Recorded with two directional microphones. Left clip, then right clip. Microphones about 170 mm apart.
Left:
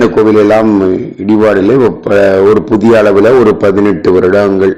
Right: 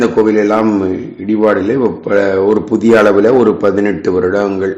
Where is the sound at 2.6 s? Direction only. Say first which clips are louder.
Left 2 dB; 35° left (ahead or behind).